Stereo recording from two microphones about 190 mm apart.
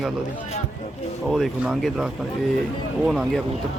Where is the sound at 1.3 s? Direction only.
Centre (ahead or behind).